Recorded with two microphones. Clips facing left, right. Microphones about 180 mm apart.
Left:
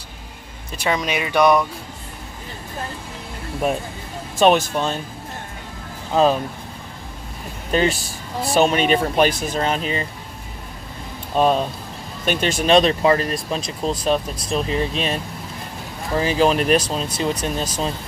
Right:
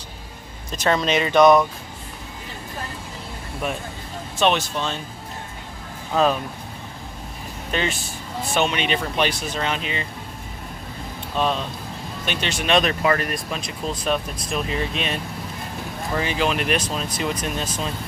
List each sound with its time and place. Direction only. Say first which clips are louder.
0.7 s speech: right 2 dB; 10° left (ahead or behind)
4.4 s speech: left 5 dB; 45° left (ahead or behind)
6.1 s speech: left 3 dB; 25° left (ahead or behind)
7.7 s speech: left 6 dB; 35° left (ahead or behind)
11.3 s speech: left 6 dB; 45° left (ahead or behind)
16.2 s speech: left 6 dB; 35° left (ahead or behind)